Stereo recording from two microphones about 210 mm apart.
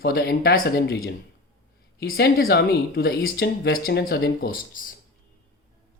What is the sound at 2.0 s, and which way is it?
Speech, 45° left (ahead or behind).